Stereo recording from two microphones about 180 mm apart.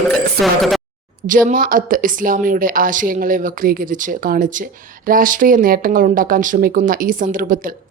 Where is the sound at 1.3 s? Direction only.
50° right (ahead or behind).